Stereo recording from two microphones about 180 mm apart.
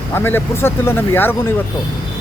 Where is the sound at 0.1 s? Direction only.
10° left (ahead or behind).